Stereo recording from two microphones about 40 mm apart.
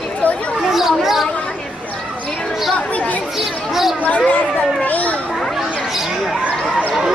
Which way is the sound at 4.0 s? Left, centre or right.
Left.